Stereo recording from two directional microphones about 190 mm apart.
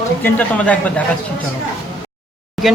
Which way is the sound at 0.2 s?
10° left (ahead or behind).